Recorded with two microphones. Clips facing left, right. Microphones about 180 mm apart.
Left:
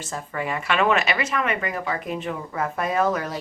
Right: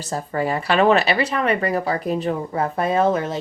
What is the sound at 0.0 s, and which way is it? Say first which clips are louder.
Speech: right 6 dB; 35° right (ahead or behind).